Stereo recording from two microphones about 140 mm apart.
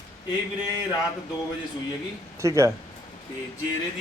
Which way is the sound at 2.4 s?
25° right (ahead or behind).